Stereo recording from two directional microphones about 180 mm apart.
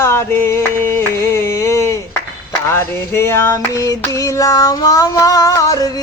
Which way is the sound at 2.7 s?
15° left (ahead or behind).